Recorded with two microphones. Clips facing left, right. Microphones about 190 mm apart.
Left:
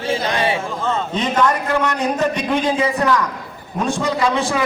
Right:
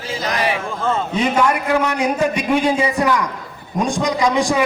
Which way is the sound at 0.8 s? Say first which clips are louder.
Right 4 dB; 10° right (ahead or behind).